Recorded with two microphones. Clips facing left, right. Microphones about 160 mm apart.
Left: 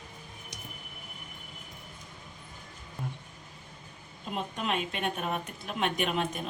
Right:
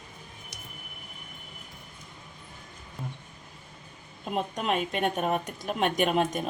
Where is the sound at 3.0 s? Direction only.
Centre (ahead or behind).